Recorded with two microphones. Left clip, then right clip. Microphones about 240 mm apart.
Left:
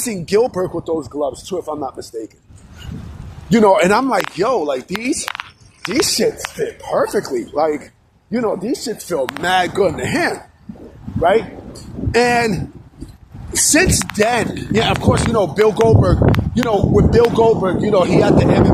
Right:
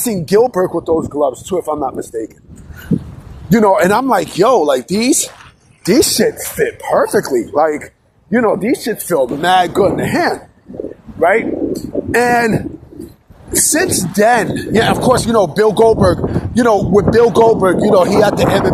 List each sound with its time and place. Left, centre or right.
0.0 s speech: right
3.5 s speech: right
11.2 s speech: right